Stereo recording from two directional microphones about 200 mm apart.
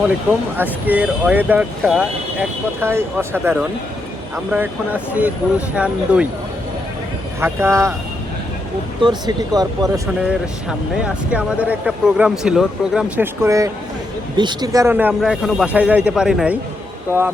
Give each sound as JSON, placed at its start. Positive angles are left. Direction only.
{"t": 0.5, "sound": "speech", "side_deg": -10}
{"t": 7.4, "sound": "speech", "side_deg": -15}
{"t": 9.0, "sound": "speech", "side_deg": -20}
{"t": 10.2, "sound": "speech", "side_deg": -5}
{"t": 13.4, "sound": "speech", "side_deg": -15}